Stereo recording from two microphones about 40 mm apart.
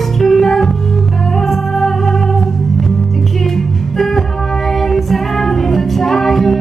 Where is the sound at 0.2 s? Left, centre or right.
Centre.